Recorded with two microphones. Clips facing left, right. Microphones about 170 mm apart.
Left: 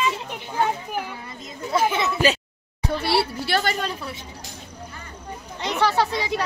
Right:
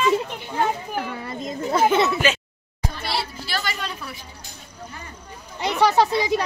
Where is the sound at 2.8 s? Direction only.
65° left (ahead or behind); by 3.8 s 50° left (ahead or behind).